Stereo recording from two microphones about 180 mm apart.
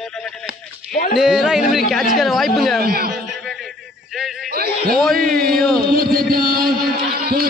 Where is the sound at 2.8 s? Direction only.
60° right (ahead or behind).